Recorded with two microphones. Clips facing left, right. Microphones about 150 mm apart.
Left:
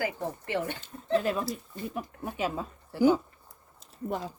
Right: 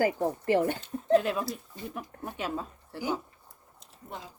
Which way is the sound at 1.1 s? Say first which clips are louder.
Right 2 dB; centre (ahead or behind).